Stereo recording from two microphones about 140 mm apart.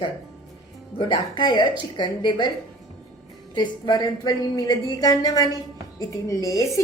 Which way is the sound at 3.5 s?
35° left (ahead or behind).